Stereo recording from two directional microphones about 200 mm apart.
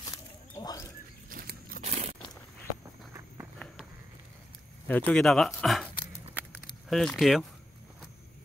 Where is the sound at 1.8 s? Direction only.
35° right (ahead or behind).